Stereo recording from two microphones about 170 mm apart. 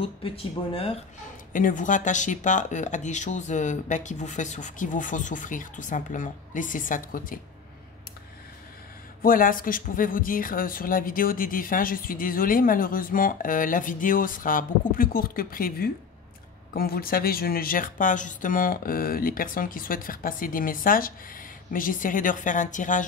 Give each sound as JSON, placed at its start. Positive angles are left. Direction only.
{"t": 1.5, "sound": "speech", "side_deg": 50}
{"t": 9.2, "sound": "speech", "side_deg": 55}